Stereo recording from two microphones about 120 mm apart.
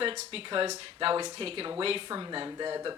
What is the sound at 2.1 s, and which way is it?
Speech, 35° right (ahead or behind).